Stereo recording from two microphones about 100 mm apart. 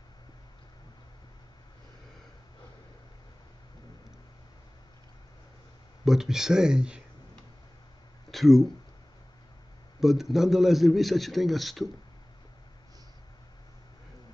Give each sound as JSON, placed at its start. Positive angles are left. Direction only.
{"t": 6.0, "sound": "a man's voice", "side_deg": -5}
{"t": 8.3, "sound": "speech", "side_deg": 0}
{"t": 9.9, "sound": "a man's voice", "side_deg": -5}